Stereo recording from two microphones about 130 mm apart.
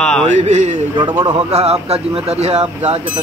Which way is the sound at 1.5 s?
55° right (ahead or behind).